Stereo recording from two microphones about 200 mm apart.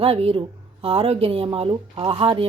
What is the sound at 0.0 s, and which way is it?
Speech, 30° right (ahead or behind).